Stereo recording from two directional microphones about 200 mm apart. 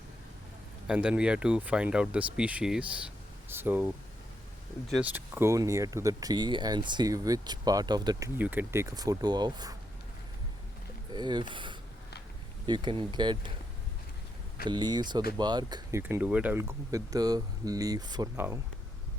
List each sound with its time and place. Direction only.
0.9 s speech: 5° right (ahead or behind)
8.4 s speech: 10° right (ahead or behind)
11.1 s speech: 20° right (ahead or behind)
14.7 s speech: 20° right (ahead or behind)